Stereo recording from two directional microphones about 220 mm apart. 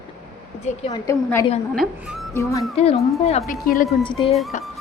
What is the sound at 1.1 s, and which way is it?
Speech, 15° left (ahead or behind).